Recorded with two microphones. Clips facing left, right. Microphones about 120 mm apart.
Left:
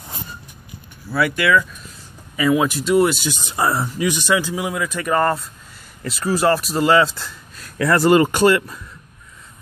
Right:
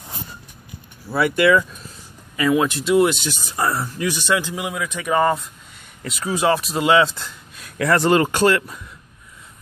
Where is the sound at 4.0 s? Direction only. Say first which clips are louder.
Left 2 dB; 10° left (ahead or behind).